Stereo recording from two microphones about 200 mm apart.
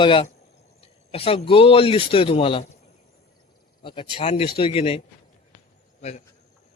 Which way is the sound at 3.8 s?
25° left (ahead or behind).